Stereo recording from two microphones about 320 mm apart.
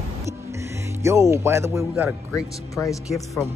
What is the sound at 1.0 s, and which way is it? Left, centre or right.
Speech, centre.